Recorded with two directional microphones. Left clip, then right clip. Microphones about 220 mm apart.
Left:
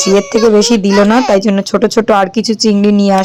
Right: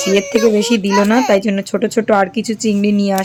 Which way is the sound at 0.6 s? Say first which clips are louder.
Left 5 dB; 10° left (ahead or behind).